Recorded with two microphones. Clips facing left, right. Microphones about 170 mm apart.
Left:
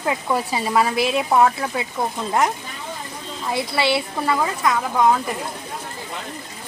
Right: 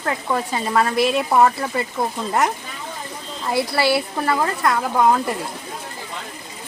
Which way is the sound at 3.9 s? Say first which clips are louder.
Right 1 dB; centre (ahead or behind).